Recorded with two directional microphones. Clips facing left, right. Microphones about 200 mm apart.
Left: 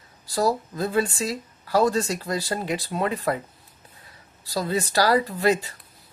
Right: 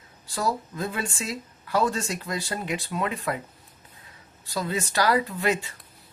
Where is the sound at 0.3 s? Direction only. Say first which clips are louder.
Left 5 dB; 35° left (ahead or behind).